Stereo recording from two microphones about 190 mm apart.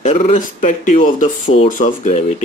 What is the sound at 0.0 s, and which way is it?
Speech, 35° left (ahead or behind).